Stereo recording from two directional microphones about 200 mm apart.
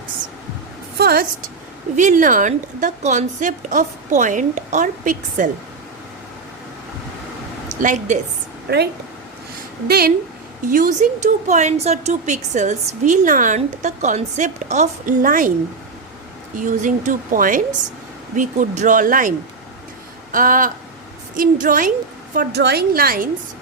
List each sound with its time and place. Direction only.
0.9 s a sound: 50° right (ahead or behind)
2.0 s a woman's voice: 40° right (ahead or behind)
7.8 s a woman's voice: 40° right (ahead or behind)
8.7 s a woman's voice: 50° right (ahead or behind)
16.6 s a woman's voice: 40° right (ahead or behind)
20.3 s a woman's voice: 40° right (ahead or behind)
22.4 s a woman's voice: 55° right (ahead or behind)